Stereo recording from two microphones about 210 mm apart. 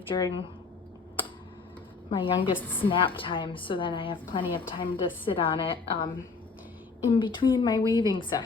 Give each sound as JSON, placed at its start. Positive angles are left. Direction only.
{"t": 0.1, "sound": "a woman's voice", "side_deg": 25}
{"t": 2.0, "sound": "a woman's voice", "side_deg": 25}
{"t": 2.6, "sound": "a woman's voice", "side_deg": 10}
{"t": 2.9, "sound": "a woman's voice", "side_deg": 25}
{"t": 7.1, "sound": "a woman's voice", "side_deg": 25}